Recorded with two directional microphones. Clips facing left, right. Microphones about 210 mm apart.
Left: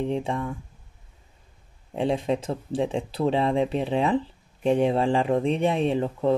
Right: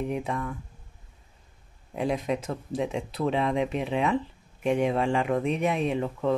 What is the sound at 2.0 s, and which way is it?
Speech, 30° left (ahead or behind).